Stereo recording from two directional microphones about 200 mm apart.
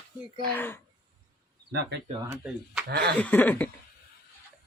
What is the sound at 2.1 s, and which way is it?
Speech, 15° right (ahead or behind).